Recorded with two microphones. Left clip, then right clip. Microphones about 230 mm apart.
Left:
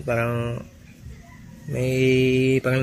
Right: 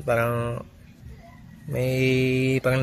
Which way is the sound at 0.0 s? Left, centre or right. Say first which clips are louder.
Right 1 dB; right.